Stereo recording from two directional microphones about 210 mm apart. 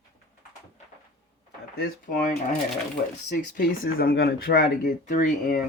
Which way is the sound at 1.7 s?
45° left (ahead or behind).